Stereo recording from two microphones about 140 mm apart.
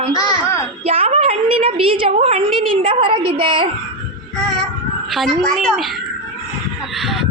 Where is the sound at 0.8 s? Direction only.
45° right (ahead or behind).